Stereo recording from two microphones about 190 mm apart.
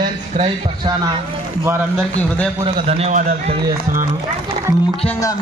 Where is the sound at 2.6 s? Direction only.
35° right (ahead or behind).